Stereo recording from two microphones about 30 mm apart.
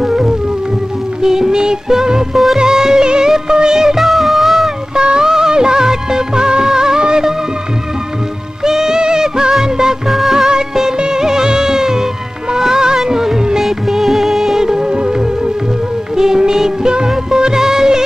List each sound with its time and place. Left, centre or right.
0.0 s music: centre
2.3 s music: centre
2.6 s music of bollywood: centre
3.5 s music: right
3.9 s music: centre
4.9 s music of bollywood: right
8.6 s music: centre
9.7 s music of bollywood: centre
10.0 s music: centre
12.6 s music of bollywood: centre
13.6 s music of bollywood: centre
14.6 s music: right